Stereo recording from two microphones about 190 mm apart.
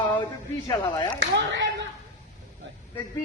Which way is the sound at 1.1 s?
75° right (ahead or behind).